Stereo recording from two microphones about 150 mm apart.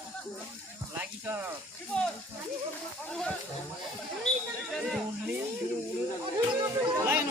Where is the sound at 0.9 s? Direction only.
15° right (ahead or behind).